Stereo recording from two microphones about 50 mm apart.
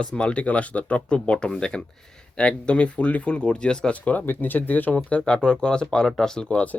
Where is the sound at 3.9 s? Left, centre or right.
Left.